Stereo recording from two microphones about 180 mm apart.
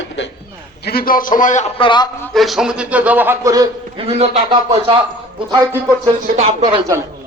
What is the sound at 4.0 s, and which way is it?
Speech, 35° right (ahead or behind).